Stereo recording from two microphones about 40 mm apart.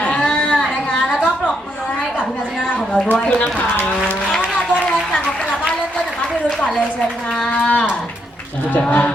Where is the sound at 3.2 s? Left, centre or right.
Left.